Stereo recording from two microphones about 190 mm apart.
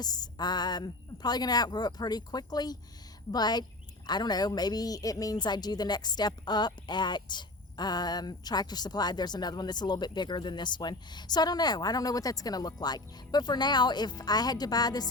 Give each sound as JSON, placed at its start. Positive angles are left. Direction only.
{"t": 0.0, "sound": "a woman's voice", "side_deg": 20}